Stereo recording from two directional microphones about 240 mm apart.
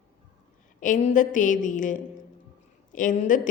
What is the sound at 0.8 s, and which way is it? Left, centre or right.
A woman's voice, left.